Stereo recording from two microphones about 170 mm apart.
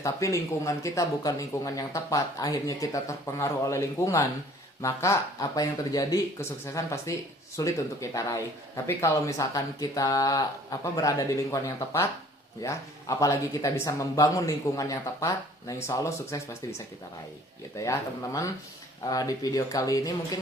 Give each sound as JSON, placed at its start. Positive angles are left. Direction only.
{"t": 0.0, "sound": "speech", "side_deg": 20}
{"t": 17.7, "sound": "speech", "side_deg": 15}